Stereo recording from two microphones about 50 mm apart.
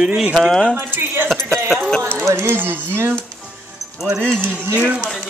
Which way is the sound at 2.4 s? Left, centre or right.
Right.